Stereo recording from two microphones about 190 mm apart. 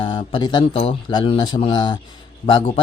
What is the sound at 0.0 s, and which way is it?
A man's voice, 25° left (ahead or behind).